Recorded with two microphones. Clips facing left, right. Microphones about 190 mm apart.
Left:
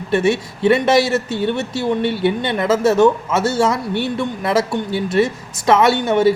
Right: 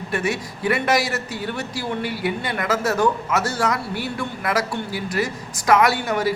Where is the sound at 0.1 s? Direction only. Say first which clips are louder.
Left 8 dB; 25° left (ahead or behind).